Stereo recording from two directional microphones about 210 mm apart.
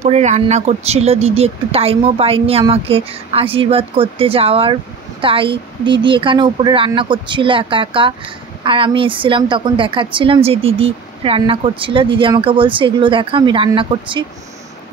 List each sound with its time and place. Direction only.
0.0 s a woman's voice: 35° right (ahead or behind)